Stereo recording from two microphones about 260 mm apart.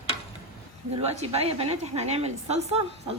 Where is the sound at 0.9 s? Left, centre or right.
Right.